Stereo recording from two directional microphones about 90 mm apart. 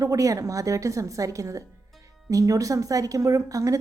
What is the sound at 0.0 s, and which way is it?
A woman's voice, 40° right (ahead or behind).